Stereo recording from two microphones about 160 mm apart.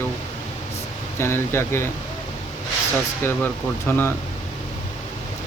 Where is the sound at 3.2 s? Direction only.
15° left (ahead or behind).